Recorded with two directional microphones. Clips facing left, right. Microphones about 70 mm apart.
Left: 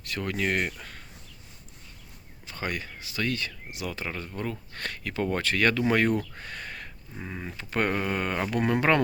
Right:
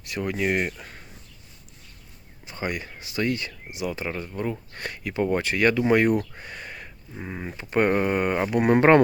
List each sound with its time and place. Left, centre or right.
0.1 s speech: centre
2.5 s speech: centre
8.7 s speech: right